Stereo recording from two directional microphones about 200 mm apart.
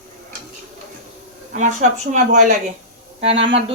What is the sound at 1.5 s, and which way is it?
Speech, 40° right (ahead or behind).